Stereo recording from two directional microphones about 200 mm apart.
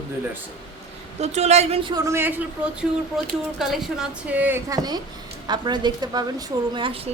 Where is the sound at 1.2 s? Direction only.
35° right (ahead or behind).